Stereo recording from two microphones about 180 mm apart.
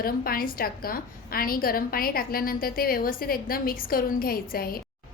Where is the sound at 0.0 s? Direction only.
55° left (ahead or behind).